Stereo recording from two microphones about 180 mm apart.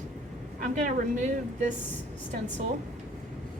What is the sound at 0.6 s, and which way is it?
A woman's voice, 45° right (ahead or behind).